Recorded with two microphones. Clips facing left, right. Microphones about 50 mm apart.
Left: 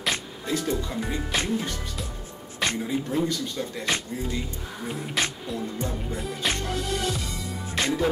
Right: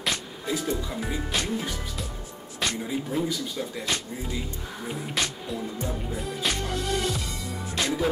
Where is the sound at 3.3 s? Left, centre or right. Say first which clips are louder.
Left 1 dB; centre.